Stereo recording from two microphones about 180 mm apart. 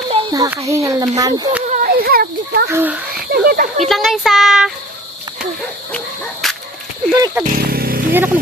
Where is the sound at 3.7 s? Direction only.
Centre (ahead or behind).